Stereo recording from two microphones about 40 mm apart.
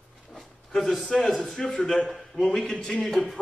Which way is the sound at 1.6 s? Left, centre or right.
Left.